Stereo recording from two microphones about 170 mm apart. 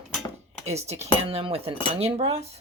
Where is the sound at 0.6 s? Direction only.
40° right (ahead or behind).